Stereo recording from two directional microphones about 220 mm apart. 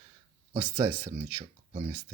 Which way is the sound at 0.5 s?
25° right (ahead or behind).